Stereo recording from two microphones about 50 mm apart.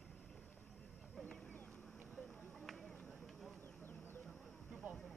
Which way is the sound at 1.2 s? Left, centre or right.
Left.